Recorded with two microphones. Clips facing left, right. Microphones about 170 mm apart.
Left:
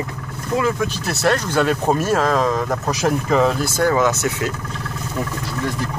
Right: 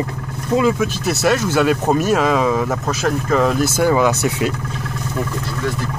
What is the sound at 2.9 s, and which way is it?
Speech, 15° left (ahead or behind).